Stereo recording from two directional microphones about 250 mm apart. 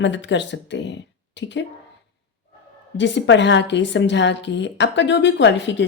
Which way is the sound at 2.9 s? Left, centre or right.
Left.